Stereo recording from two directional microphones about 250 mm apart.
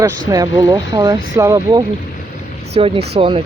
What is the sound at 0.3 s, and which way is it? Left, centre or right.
Speech, centre.